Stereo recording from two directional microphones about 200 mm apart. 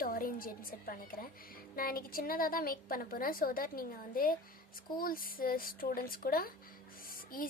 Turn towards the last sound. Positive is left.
turn(degrees=45)  # may be behind; listen again after turning